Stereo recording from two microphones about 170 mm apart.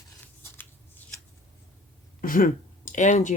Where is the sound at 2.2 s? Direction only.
55° left (ahead or behind).